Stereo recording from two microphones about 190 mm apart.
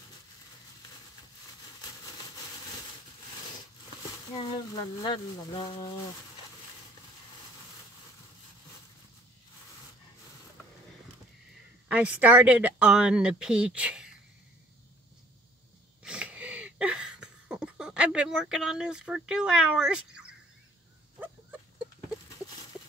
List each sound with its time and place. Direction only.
4.4 s speech: 25° left (ahead or behind)
11.9 s a woman's voice: 5° right (ahead or behind)
16.0 s a sound: 5° right (ahead or behind)